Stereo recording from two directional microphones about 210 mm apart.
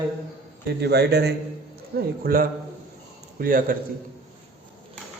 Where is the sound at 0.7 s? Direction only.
50° right (ahead or behind).